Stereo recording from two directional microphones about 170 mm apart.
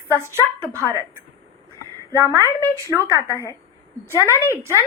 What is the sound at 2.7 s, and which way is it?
Speech, 20° right (ahead or behind).